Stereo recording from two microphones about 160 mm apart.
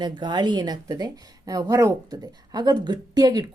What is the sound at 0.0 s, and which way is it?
A woman's voice, 30° right (ahead or behind).